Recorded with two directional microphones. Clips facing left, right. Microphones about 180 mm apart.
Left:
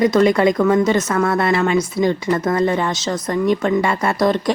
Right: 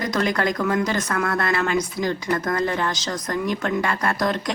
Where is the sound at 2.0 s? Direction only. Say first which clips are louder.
Left 7 dB; 65° left (ahead or behind).